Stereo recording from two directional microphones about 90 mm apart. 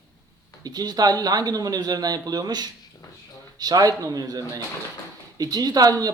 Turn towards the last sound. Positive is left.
turn(degrees=-45)  # may be behind; listen again after turning